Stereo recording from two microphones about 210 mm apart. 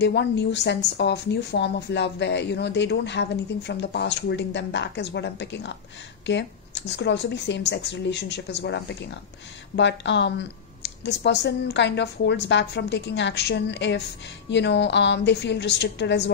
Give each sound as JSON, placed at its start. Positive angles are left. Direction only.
{"t": 0.0, "sound": "speech", "side_deg": 55}